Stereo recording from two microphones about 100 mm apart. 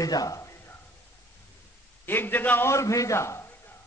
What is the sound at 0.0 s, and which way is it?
Speech, 35° left (ahead or behind).